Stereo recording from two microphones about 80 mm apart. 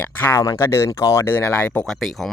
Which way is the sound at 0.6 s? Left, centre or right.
Left.